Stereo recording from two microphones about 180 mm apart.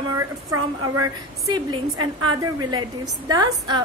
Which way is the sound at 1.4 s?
25° right (ahead or behind).